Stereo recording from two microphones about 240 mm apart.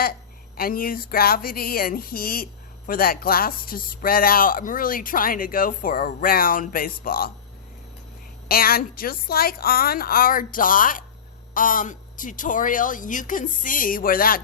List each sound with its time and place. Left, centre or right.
0.0 s speech: left
8.4 s speech: left